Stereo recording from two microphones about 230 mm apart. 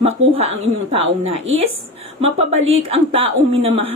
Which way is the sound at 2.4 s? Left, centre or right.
Right.